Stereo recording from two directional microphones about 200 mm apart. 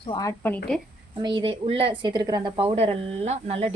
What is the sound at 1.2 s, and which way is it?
A woman's voice, 25° right (ahead or behind).